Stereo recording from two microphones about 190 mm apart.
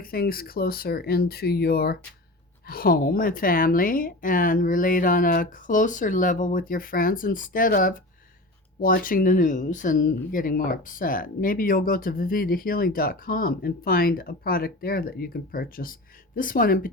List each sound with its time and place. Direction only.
0.0 s speech: 50° left (ahead or behind)